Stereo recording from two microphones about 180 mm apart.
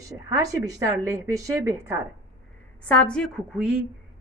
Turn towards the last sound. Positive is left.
turn(degrees=0)  # may be behind; listen again after turning